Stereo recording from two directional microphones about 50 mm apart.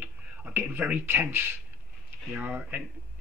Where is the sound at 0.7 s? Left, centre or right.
Right.